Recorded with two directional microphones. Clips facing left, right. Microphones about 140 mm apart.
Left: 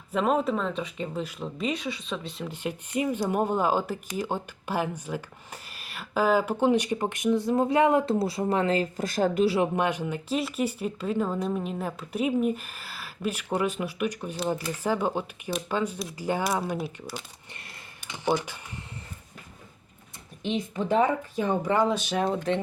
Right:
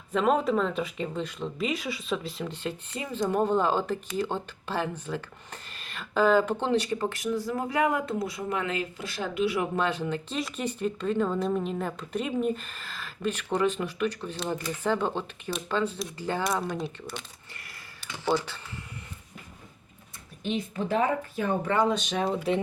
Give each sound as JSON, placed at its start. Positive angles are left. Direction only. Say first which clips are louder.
{"t": 0.1, "sound": "speech", "louder": "right 1 dB", "side_deg": 0}
{"t": 2.5, "sound": "speech", "louder": "left 2 dB", "side_deg": 15}
{"t": 9.6, "sound": "speech", "louder": "left 2 dB", "side_deg": 15}
{"t": 17.5, "sound": "a sound", "louder": "left 2 dB", "side_deg": 25}
{"t": 20.4, "sound": "speech", "louder": "left 1 dB", "side_deg": 20}
{"t": 22.2, "sound": "speech", "louder": "even", "side_deg": -5}